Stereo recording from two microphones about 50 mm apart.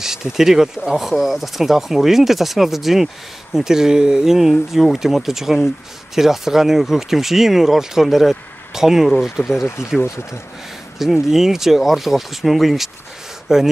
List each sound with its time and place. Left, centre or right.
0.0 s speech: centre
10.0 s speech: left
11.0 s speech: centre